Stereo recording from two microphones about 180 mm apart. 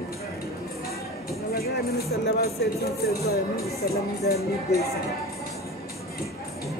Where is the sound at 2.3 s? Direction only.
60° left (ahead or behind).